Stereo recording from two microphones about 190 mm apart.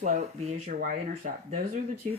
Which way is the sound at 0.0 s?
35° right (ahead or behind).